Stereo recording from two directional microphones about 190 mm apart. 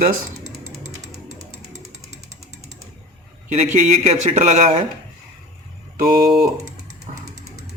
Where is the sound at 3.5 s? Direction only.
40° right (ahead or behind).